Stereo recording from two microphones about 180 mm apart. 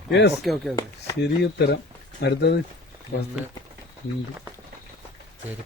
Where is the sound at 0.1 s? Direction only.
70° left (ahead or behind).